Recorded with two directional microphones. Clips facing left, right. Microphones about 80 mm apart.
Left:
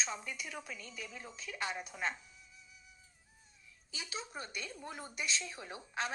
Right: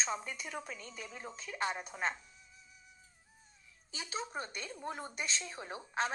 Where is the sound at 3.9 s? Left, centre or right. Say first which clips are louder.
Right 4 dB; right.